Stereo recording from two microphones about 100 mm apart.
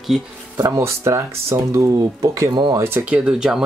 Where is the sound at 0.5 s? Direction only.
30° right (ahead or behind).